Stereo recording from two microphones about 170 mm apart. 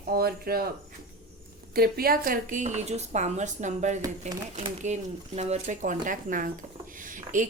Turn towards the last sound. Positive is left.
turn(degrees=-50)  # may be behind; listen again after turning